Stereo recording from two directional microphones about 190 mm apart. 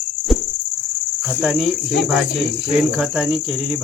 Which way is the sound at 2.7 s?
5° right (ahead or behind).